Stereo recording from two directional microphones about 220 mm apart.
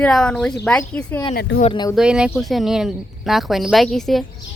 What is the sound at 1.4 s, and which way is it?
Speech, 45° left (ahead or behind).